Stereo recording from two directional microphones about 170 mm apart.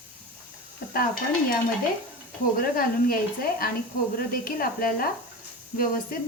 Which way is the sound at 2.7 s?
60° left (ahead or behind).